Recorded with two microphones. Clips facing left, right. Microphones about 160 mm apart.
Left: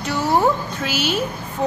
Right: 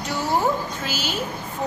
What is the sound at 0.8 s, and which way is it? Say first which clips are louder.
Speech: left 6 dB; 65° left (ahead or behind).